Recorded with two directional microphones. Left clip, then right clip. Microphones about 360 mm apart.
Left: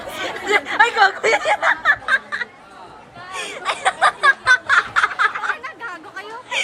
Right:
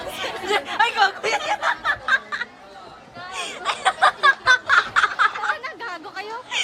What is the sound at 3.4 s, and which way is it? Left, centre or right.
Snicker, centre.